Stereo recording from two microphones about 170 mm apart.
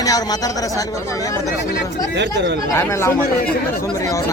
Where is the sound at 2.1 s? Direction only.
90° right.